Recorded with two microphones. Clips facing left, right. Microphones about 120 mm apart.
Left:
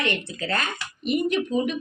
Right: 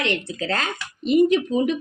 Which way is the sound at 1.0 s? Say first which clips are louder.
Right 7 dB; 25° right (ahead or behind).